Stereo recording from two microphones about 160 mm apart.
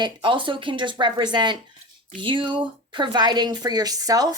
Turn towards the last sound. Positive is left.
turn(degrees=-20)  # may be behind; listen again after turning